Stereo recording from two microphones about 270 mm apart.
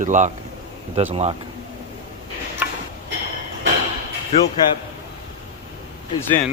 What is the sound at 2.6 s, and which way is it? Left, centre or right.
Tick-tock, centre.